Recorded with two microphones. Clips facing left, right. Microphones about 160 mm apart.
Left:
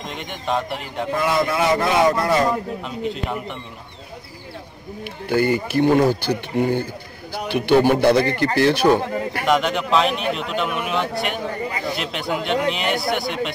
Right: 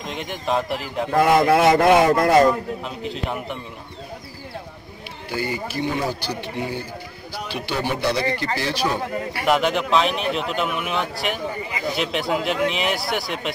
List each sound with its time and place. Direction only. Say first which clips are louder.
0.0 s a man's voice: right 1 dB; centre (ahead or behind)
1.1 s speech: right 5 dB; 60° right (ahead or behind)
2.8 s a man's voice: left 2 dB; centre (ahead or behind)
5.3 s speech: left 8 dB; 55° left (ahead or behind)
9.5 s a man's voice: even; centre (ahead or behind)